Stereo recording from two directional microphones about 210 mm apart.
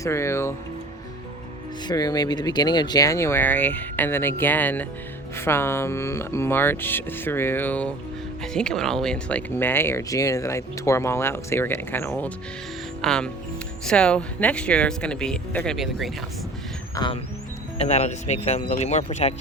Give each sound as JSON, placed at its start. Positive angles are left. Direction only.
{"t": 0.0, "sound": "speech", "side_deg": 15}
{"t": 1.9, "sound": "speech", "side_deg": 20}
{"t": 16.9, "sound": "music", "side_deg": 20}
{"t": 17.7, "sound": "speech", "side_deg": 30}